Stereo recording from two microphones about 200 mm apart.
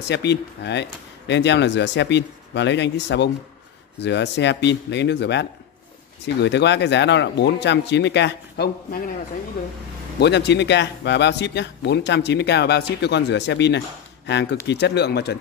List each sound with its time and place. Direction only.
0.1 s speech: 60° left (ahead or behind)
10.2 s speech: 60° left (ahead or behind)